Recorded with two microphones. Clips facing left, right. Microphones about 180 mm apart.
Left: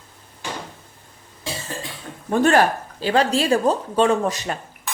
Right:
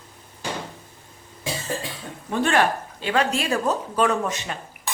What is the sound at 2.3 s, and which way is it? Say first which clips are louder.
Speech: left 4 dB; 40° left (ahead or behind).